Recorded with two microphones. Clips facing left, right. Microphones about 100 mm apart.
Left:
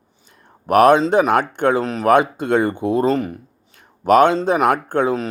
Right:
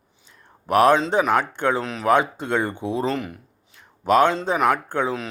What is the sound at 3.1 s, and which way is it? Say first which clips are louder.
Speech: left 7 dB; 40° left (ahead or behind).